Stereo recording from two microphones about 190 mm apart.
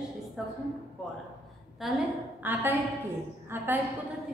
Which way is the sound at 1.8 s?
Centre (ahead or behind).